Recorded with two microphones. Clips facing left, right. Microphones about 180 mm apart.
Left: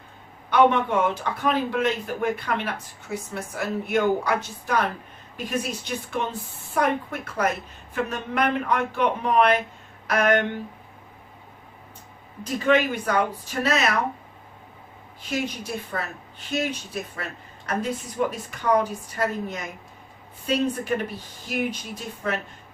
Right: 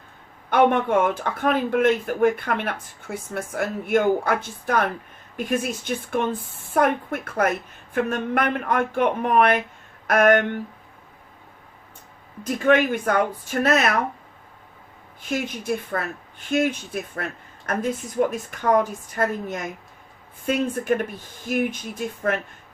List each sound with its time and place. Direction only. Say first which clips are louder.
0.5 s speech: right 1 dB; 50° right (ahead or behind)
12.4 s speech: right 2 dB; 50° right (ahead or behind)
15.3 s speech: right 3 dB; 50° right (ahead or behind)